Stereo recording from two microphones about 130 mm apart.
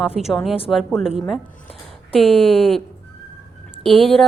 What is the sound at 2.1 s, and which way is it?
Speech, 45° left (ahead or behind).